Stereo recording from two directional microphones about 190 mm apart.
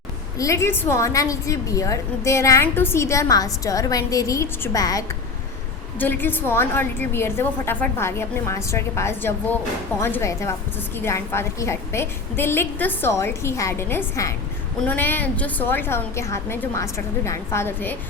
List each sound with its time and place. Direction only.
0.3 s a woman's voice: 15° left (ahead or behind)